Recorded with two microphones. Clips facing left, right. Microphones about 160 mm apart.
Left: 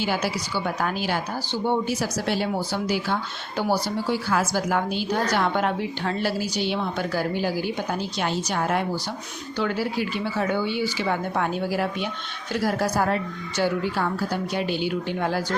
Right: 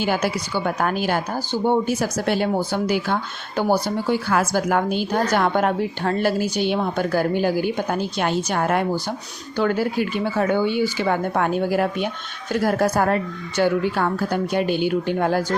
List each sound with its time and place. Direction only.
0.0 s a woman's voice: 50° right (ahead or behind)